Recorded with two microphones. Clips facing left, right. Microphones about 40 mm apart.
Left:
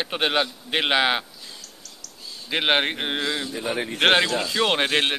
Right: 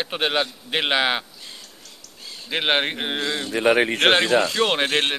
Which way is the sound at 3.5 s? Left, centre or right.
Right.